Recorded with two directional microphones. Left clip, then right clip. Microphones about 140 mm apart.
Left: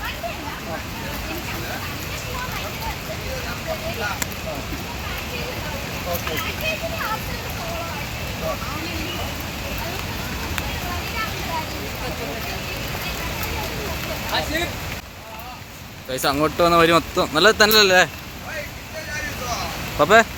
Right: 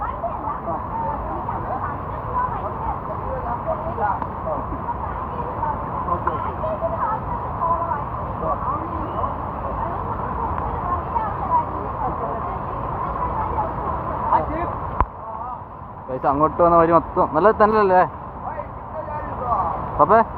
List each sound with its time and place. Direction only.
16.2 s speech: 30° left (ahead or behind)
17.7 s speech: 50° right (ahead or behind)
20.0 s speech: 50° left (ahead or behind)